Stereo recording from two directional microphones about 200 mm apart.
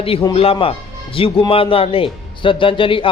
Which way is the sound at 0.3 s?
25° left (ahead or behind).